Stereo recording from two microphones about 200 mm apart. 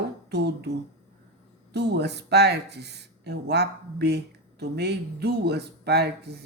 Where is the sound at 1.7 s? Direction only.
55° right (ahead or behind).